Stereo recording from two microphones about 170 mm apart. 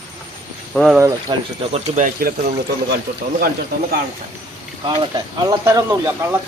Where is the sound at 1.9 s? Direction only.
55° right (ahead or behind).